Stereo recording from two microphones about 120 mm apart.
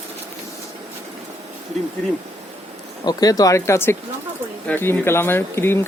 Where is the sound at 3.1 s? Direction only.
30° left (ahead or behind).